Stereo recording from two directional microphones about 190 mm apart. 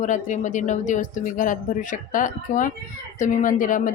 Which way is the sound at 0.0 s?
40° left (ahead or behind).